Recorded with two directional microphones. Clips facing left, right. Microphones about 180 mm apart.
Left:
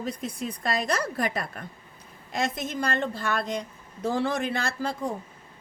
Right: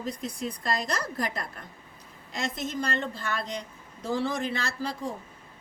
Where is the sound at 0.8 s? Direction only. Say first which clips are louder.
Left 4 dB; 60° left (ahead or behind).